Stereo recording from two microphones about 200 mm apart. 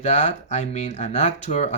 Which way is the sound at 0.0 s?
35° left (ahead or behind).